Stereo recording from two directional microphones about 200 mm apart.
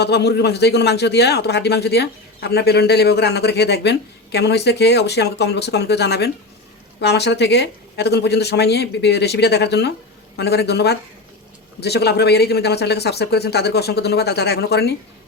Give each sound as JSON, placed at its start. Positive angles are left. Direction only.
{"t": 0.0, "sound": "a man's voice", "side_deg": 55}